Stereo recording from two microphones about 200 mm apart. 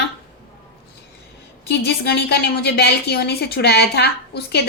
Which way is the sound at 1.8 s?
55° left (ahead or behind).